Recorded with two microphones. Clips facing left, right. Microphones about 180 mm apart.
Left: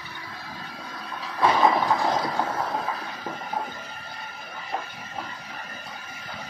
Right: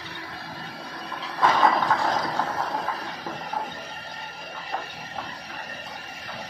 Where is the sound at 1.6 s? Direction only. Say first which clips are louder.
Left 1 dB; 15° left (ahead or behind).